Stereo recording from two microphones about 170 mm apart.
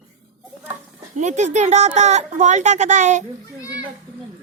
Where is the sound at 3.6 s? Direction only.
20° left (ahead or behind).